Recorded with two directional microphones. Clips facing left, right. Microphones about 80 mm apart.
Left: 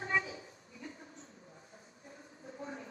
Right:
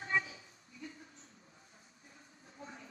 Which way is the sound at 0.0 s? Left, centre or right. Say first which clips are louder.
Left 1 dB; left.